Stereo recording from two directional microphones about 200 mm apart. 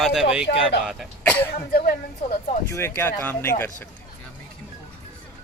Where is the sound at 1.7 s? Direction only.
50° left (ahead or behind).